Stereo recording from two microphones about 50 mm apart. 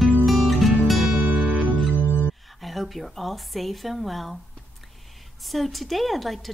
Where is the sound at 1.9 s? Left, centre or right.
Left.